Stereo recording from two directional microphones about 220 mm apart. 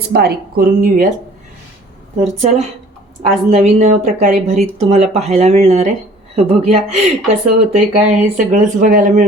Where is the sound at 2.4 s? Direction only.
30° right (ahead or behind).